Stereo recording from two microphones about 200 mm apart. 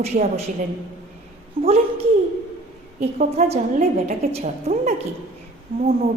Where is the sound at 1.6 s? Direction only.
45° right (ahead or behind).